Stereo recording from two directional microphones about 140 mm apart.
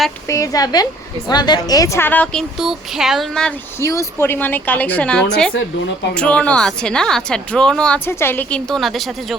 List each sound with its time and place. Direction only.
0.3 s a woman's voice: 25° left (ahead or behind)
2.6 s speech: 5° right (ahead or behind)
3.8 s a woman's voice: 20° left (ahead or behind); by 9.0 s centre (ahead or behind)